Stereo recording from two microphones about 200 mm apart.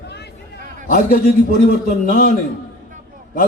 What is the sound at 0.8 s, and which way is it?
A man's voice, 40° left (ahead or behind).